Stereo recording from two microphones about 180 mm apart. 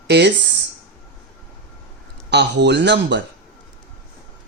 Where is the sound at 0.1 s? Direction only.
70° right (ahead or behind).